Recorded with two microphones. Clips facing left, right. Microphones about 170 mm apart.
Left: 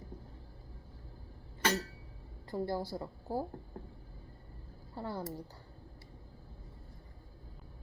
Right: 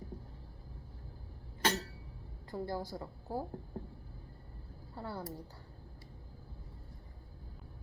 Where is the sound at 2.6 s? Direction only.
10° left (ahead or behind).